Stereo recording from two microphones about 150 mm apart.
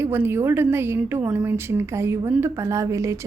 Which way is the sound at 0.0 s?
15° right (ahead or behind).